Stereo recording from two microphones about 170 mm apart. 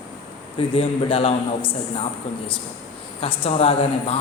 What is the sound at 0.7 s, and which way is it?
Speech, 35° left (ahead or behind).